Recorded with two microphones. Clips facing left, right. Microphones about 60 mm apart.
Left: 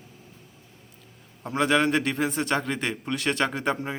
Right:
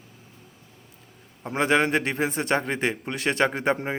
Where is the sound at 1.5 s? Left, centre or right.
Right.